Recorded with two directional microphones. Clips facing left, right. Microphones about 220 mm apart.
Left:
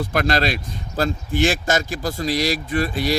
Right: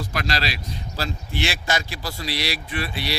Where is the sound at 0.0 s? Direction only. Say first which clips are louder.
Left 7 dB; 50° left (ahead or behind).